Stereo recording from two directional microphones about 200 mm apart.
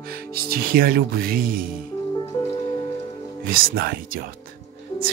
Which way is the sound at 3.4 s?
45° right (ahead or behind).